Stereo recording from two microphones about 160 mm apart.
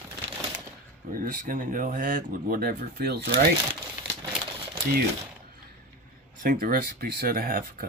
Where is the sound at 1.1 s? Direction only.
60° right (ahead or behind).